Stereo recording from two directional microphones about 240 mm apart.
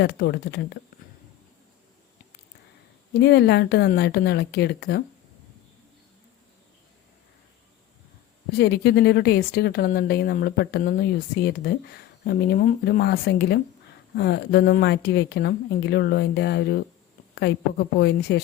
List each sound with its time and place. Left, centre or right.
0.0 s speech: left
3.2 s speech: left
8.5 s speech: left